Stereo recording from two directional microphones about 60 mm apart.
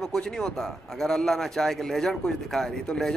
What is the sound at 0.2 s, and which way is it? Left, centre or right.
A man's voice, centre.